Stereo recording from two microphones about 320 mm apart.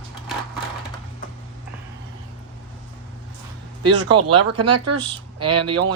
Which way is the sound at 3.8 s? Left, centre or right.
Right.